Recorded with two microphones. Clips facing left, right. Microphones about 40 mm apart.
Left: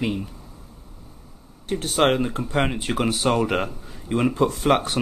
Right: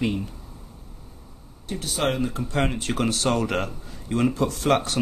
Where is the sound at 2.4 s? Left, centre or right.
Left.